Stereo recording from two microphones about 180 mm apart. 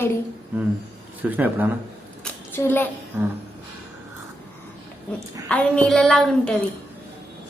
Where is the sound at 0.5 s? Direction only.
10° right (ahead or behind).